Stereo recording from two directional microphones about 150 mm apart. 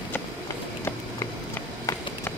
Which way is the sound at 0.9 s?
15° left (ahead or behind).